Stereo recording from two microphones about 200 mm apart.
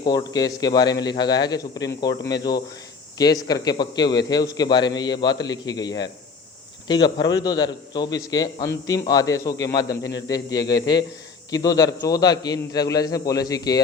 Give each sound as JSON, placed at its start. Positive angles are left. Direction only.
{"t": 0.0, "sound": "a man's voice", "side_deg": 20}